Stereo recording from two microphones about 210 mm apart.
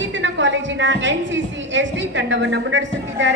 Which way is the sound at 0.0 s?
60° right (ahead or behind).